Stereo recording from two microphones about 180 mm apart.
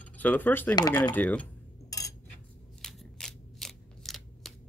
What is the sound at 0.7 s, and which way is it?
Speech, 15° left (ahead or behind).